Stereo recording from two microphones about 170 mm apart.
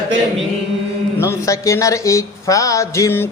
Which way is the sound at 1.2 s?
15° left (ahead or behind).